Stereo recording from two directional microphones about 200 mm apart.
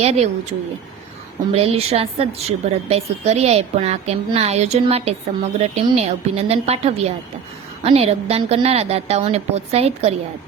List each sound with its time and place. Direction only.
0.0 s a woman's voice: 30° right (ahead or behind)
1.5 s a woman's voice: 30° right (ahead or behind)